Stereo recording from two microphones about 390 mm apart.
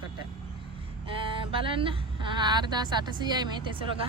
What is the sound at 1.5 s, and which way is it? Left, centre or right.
Speech, centre.